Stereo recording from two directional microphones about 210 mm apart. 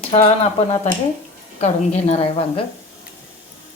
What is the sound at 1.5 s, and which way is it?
Speech, 30° left (ahead or behind).